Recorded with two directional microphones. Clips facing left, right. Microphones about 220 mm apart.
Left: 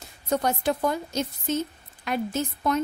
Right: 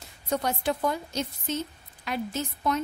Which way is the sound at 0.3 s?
45° left (ahead or behind).